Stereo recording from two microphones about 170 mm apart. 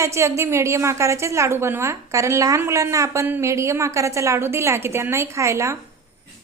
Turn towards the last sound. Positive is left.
turn(degrees=-15)  # may be behind; listen again after turning